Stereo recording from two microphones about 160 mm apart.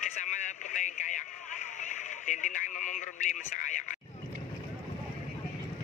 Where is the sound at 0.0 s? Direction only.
50° left (ahead or behind).